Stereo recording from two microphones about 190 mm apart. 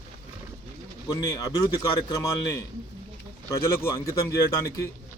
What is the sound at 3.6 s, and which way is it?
A man's voice, 15° left (ahead or behind).